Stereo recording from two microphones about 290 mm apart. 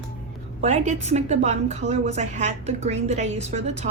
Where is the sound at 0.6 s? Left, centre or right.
Right.